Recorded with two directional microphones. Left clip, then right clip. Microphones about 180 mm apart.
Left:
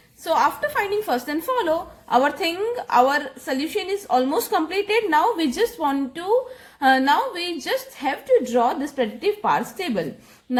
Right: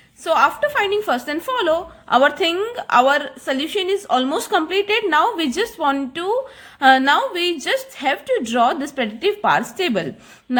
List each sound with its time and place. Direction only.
0.3 s a woman's voice: 25° right (ahead or behind)